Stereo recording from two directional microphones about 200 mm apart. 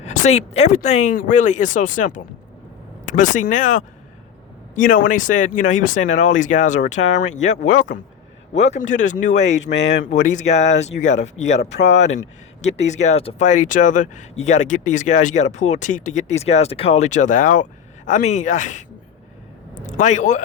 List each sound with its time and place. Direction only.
0.0 s speech: 35° left (ahead or behind)
9.7 s speech: 65° left (ahead or behind)
10.0 s speech: 40° left (ahead or behind)